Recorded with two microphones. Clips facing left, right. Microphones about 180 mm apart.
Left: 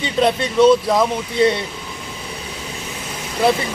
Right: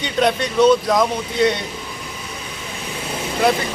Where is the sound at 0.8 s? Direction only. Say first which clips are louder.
Even; 5° left (ahead or behind).